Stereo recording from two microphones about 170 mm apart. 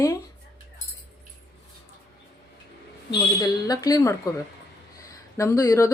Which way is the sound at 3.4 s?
20° left (ahead or behind).